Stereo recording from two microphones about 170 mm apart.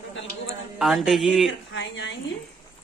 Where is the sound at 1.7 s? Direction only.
90° left.